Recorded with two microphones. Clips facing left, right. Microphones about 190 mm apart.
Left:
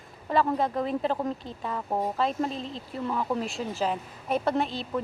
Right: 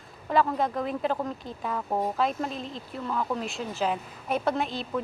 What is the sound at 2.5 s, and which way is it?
Speech, 30° left (ahead or behind).